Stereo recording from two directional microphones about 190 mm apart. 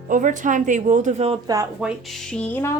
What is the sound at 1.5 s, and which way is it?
Speech, 15° right (ahead or behind).